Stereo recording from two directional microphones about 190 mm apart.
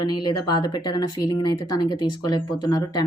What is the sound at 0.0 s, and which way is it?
Speech, 20° left (ahead or behind).